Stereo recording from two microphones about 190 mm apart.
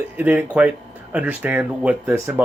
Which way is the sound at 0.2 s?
10° right (ahead or behind).